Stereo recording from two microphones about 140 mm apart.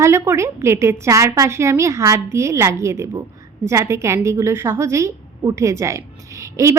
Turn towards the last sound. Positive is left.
turn(degrees=-20)  # may be behind; listen again after turning